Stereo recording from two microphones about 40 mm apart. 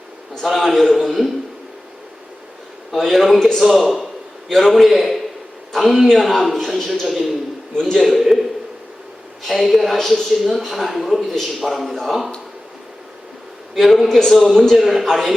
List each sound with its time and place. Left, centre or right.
0.6 s a man's voice: centre
2.9 s a woman's voice: centre
13.7 s a woman's voice: centre
14.8 s a woman's voice: centre